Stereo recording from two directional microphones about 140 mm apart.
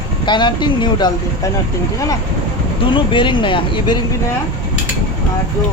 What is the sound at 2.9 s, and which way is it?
Speech, 35° left (ahead or behind).